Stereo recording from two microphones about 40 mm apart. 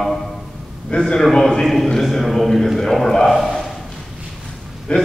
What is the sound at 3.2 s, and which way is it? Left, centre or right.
Speech, centre.